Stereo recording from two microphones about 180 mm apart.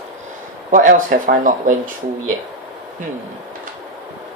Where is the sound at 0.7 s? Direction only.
50° right (ahead or behind).